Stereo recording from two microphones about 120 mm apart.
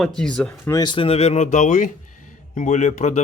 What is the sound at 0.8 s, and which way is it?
A man's voice, 45° left (ahead or behind).